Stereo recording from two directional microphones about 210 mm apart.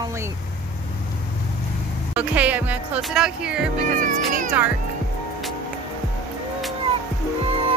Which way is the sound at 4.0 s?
40° right (ahead or behind).